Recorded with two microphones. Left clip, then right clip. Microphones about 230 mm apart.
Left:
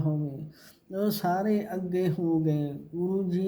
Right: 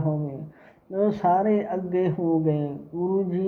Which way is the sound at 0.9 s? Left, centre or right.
Left.